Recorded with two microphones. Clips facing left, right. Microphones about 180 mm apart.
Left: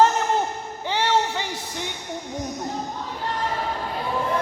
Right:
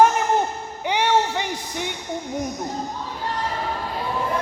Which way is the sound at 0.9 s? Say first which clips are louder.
Right 2 dB; 15° right (ahead or behind).